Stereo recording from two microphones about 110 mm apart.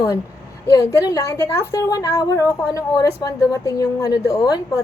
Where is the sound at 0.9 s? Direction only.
30° left (ahead or behind).